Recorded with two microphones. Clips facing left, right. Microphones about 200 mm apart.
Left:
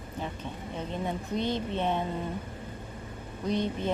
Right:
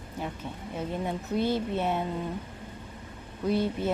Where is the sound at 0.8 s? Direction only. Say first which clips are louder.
Right 2 dB; 10° right (ahead or behind).